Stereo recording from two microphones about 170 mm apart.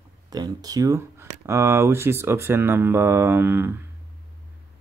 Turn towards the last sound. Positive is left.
turn(degrees=-10)  # may be behind; listen again after turning